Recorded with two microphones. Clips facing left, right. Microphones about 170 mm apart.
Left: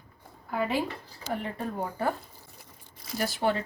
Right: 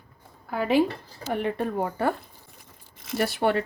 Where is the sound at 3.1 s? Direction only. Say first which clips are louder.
Right 4 dB; 65° right (ahead or behind).